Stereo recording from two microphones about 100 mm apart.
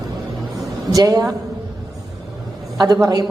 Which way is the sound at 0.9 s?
35° right (ahead or behind).